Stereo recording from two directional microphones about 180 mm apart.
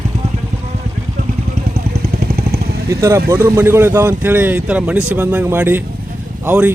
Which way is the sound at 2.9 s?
15° right (ahead or behind).